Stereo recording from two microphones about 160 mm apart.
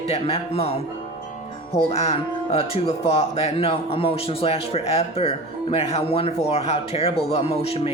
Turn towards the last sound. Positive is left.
turn(degrees=40)  # may be behind; listen again after turning